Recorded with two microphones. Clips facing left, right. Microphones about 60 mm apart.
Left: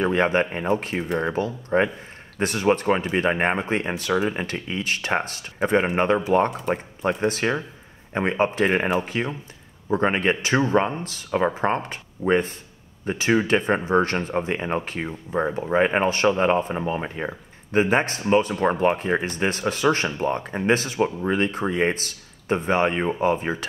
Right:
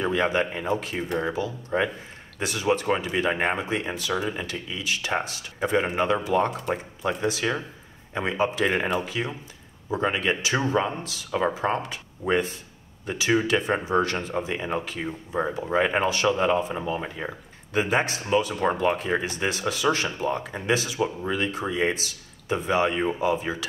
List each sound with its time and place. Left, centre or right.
0.0 s speech: left